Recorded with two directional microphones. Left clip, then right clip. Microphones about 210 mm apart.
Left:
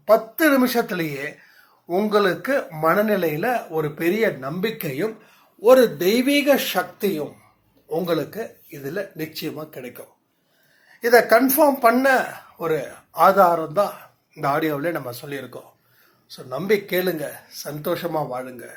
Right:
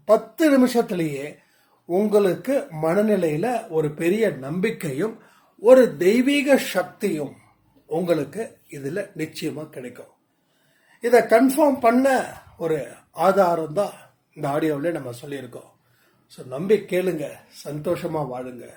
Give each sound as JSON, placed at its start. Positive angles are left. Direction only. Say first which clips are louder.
{"t": 0.0, "sound": "speech", "louder": "left 1 dB", "side_deg": -20}
{"t": 1.9, "sound": "speech", "louder": "even", "side_deg": -20}
{"t": 9.7, "sound": "speech", "louder": "left 1 dB", "side_deg": 0}
{"t": 16.9, "sound": "speech", "louder": "left 1 dB", "side_deg": -5}